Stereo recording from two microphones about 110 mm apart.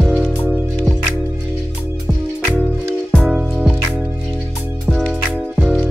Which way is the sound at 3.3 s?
5° right (ahead or behind).